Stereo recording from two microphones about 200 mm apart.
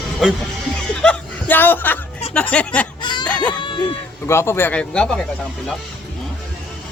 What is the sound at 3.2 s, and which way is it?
Music, 5° left (ahead or behind).